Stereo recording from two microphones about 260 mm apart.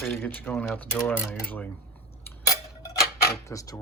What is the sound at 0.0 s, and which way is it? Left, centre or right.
Speech, centre.